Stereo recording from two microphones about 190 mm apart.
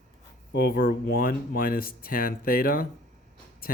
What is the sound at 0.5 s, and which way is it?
Speech, 50° left (ahead or behind).